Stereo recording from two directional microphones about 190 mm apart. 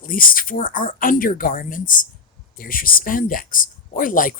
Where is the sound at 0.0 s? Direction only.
45° left (ahead or behind).